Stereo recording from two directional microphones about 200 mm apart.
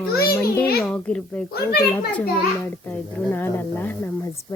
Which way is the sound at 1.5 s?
50° left (ahead or behind).